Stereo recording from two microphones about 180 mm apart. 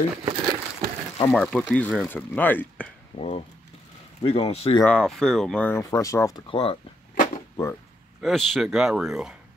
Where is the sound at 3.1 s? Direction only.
30° left (ahead or behind).